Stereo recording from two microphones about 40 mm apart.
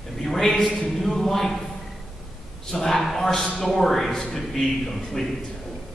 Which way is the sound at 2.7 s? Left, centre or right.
Centre.